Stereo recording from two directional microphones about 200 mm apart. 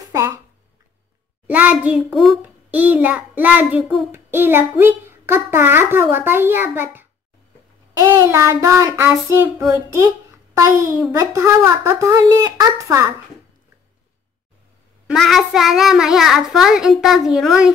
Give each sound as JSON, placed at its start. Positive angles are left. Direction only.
{"t": 0.0, "sound": "a sound", "side_deg": -15}
{"t": 1.5, "sound": "a child's voice", "side_deg": -10}
{"t": 15.0, "sound": "child singing", "side_deg": 0}